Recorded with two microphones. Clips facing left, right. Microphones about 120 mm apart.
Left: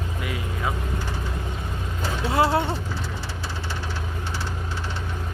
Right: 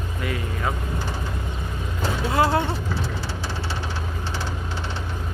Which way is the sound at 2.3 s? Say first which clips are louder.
Even; 25° left (ahead or behind).